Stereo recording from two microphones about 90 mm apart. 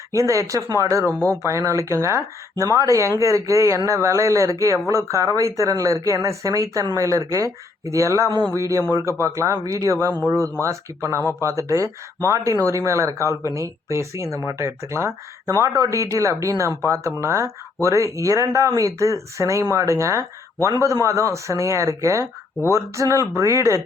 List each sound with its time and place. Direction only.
0.1 s speech: 35° right (ahead or behind)
11.2 s speech: 25° left (ahead or behind)
11.4 s speech: 35° right (ahead or behind)